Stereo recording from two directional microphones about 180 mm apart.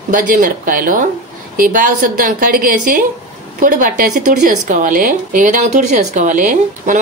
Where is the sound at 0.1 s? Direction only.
50° right (ahead or behind).